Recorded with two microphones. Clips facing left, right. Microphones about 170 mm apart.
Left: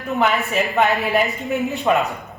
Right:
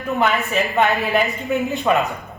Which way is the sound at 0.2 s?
Centre (ahead or behind).